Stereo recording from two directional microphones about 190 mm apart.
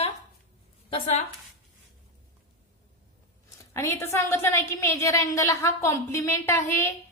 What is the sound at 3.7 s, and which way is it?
A woman's voice, 15° left (ahead or behind).